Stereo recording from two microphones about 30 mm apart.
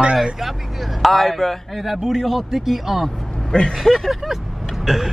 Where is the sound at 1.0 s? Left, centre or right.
Centre.